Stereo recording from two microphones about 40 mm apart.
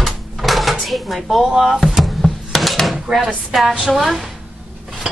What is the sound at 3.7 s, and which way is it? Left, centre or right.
Speech, centre.